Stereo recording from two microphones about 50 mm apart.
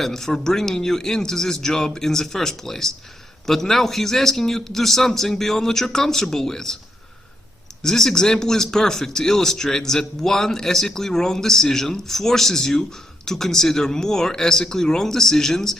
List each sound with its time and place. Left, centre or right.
0.0 s a man's voice: centre
7.8 s a man's voice: centre